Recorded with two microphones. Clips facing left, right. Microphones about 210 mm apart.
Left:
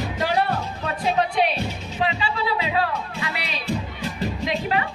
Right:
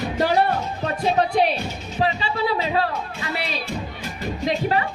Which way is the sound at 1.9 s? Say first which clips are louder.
Right 2 dB; 35° right (ahead or behind).